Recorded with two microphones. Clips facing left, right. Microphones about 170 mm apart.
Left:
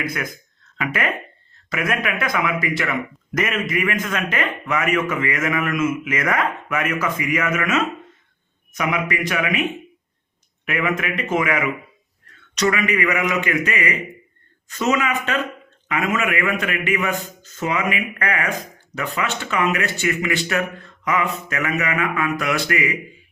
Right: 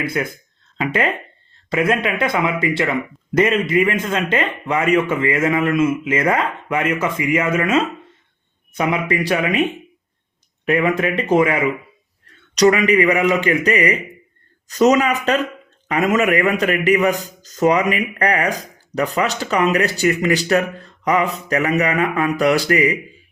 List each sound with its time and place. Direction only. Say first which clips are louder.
0.0 s a man's voice: right 5 dB; 30° right (ahead or behind)
10.7 s a man's voice: right 6 dB; 35° right (ahead or behind)